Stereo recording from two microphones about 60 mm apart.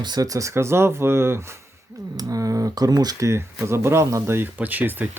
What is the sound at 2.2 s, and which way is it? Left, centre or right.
Speech, right.